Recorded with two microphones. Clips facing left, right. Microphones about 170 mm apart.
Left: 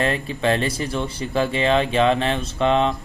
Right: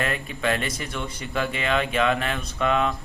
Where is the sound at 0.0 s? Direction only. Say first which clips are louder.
Left 5 dB; 30° left (ahead or behind).